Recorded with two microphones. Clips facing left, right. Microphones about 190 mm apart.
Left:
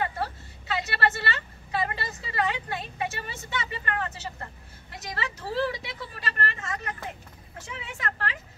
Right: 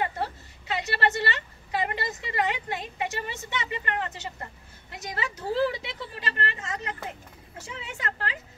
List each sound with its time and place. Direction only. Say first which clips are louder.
0.0 s a woman's voice: even; 20° right (ahead or behind)
8.0 s speech: left 1 dB; 25° right (ahead or behind)